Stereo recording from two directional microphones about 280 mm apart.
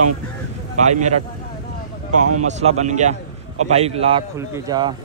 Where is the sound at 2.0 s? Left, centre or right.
Right.